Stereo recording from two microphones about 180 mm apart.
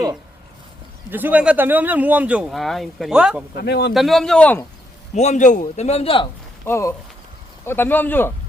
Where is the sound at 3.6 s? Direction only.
65° left (ahead or behind).